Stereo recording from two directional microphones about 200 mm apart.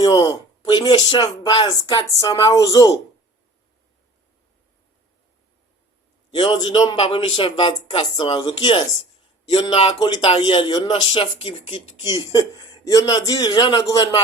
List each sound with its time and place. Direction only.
0.0 s speech: 20° left (ahead or behind)
6.3 s speech: 20° left (ahead or behind)